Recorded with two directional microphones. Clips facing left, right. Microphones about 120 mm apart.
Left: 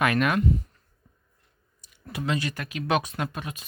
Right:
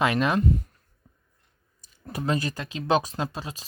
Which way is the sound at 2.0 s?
40° right (ahead or behind).